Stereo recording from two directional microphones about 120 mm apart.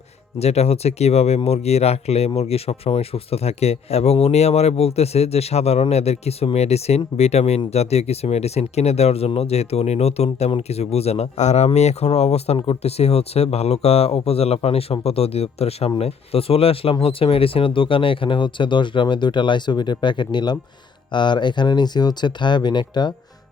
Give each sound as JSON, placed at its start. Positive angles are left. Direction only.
{"t": 0.3, "sound": "speech", "side_deg": 60}